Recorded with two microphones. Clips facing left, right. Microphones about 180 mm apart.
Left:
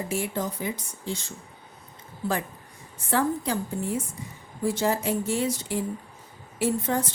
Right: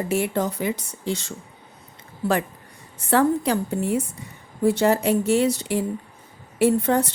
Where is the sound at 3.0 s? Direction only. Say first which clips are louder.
Right 6 dB; 70° right (ahead or behind).